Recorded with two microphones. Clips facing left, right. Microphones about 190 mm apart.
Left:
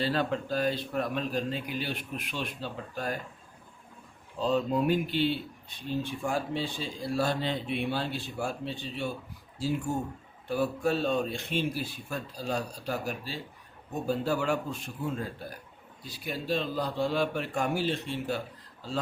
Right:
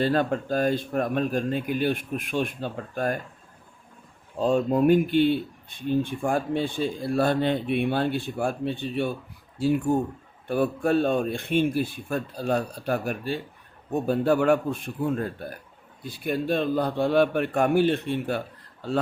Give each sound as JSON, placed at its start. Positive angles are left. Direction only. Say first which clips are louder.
{"t": 0.0, "sound": "speech", "louder": "right 6 dB", "side_deg": -50}
{"t": 4.4, "sound": "speech", "louder": "right 5 dB", "side_deg": -50}